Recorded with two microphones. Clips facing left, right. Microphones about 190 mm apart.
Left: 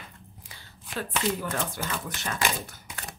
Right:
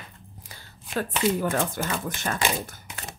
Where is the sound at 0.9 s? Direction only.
50° right (ahead or behind).